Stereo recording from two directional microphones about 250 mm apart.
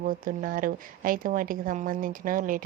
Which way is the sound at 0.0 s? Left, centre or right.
Right.